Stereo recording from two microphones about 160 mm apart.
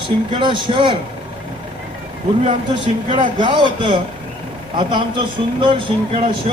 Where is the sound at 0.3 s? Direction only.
30° right (ahead or behind).